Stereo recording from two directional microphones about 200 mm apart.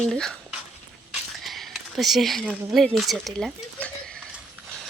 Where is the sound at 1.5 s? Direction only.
Centre (ahead or behind).